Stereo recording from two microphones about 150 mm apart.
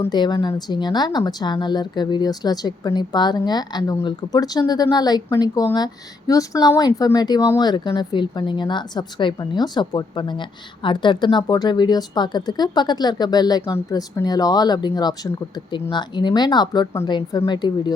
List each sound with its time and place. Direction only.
0.1 s speech: 30° left (ahead or behind)